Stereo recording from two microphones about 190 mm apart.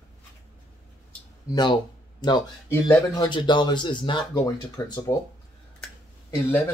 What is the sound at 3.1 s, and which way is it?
Speech, 20° left (ahead or behind).